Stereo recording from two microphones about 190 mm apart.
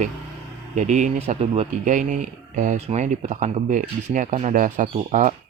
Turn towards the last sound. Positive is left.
turn(degrees=-45)  # may be behind; listen again after turning